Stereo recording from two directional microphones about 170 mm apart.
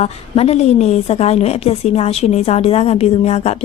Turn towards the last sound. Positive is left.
turn(degrees=40)  # may be behind; listen again after turning